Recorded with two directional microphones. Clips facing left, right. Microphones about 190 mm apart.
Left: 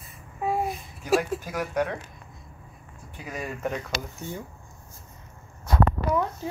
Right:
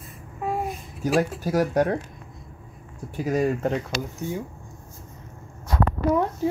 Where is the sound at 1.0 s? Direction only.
40° right (ahead or behind).